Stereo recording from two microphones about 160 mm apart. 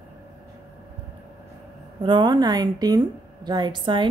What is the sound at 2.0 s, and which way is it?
A woman's voice, 30° right (ahead or behind).